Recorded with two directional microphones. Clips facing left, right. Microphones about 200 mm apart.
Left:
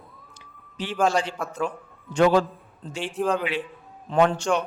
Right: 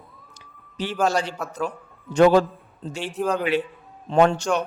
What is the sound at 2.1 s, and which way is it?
Speech, 40° right (ahead or behind).